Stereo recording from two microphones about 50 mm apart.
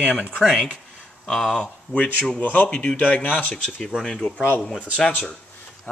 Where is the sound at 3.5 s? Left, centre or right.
Centre.